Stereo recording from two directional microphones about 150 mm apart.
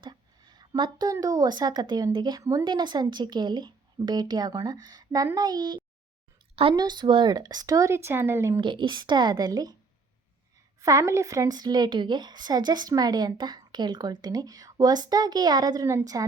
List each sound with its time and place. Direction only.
0.0 s a woman's voice: 30° right (ahead or behind)
8.6 s a woman's voice: 30° right (ahead or behind)
10.8 s a woman's voice: 20° right (ahead or behind)